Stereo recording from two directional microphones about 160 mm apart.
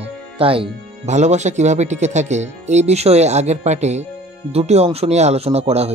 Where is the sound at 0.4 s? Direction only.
35° right (ahead or behind).